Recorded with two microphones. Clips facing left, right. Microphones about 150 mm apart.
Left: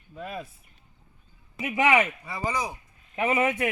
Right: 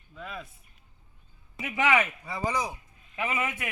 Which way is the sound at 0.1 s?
40° left (ahead or behind).